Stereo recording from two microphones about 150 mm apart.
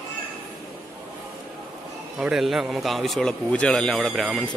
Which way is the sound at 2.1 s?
5° right (ahead or behind).